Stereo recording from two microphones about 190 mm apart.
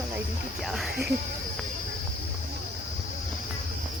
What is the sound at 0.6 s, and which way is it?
Speech, centre (ahead or behind).